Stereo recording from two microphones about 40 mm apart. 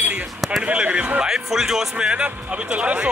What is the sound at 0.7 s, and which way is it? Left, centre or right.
Speech, right.